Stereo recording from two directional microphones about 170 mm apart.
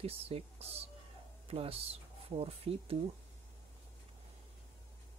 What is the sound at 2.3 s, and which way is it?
Speech, 35° right (ahead or behind).